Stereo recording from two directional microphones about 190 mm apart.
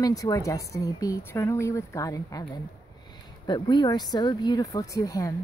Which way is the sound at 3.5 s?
25° left (ahead or behind).